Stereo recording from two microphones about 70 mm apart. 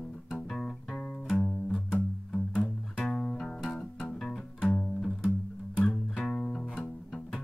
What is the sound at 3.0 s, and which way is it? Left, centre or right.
Music, centre.